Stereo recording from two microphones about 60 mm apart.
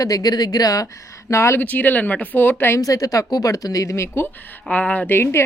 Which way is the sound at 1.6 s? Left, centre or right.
Left.